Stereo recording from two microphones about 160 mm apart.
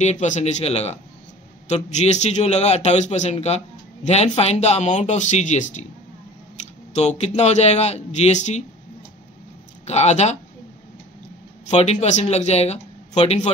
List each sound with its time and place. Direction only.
0.0 s a man's voice: 45° left (ahead or behind)
6.9 s a man's voice: 45° left (ahead or behind)
9.8 s a man's voice: 45° left (ahead or behind)
11.7 s a man's voice: 40° left (ahead or behind)